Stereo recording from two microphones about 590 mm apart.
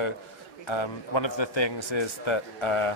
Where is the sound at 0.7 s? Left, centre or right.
Left.